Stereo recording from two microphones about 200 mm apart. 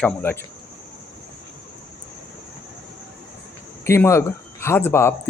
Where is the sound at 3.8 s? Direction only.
15° left (ahead or behind).